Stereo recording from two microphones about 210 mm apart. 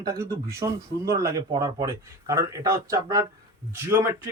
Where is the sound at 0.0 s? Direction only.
15° right (ahead or behind).